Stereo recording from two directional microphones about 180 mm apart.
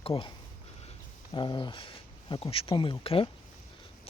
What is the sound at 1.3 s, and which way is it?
Speech, 25° left (ahead or behind).